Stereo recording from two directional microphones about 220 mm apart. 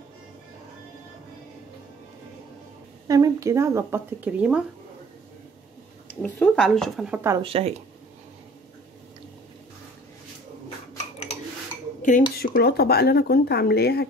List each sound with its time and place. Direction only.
3.1 s speech: 15° right (ahead or behind)
6.2 s speech: 5° left (ahead or behind)
7.2 s speech: 10° right (ahead or behind)
7.4 s speech: 25° right (ahead or behind)
12.0 s speech: 40° left (ahead or behind)